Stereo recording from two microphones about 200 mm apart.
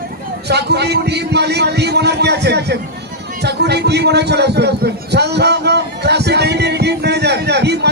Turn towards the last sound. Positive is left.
turn(degrees=-55)  # may be behind; listen again after turning